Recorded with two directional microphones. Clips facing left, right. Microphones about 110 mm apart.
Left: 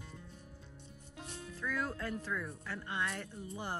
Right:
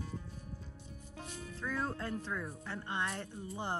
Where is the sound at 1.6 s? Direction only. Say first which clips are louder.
Even; 25° right (ahead or behind).